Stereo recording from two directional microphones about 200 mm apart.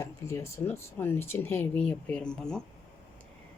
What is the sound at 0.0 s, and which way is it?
Speech, 15° left (ahead or behind).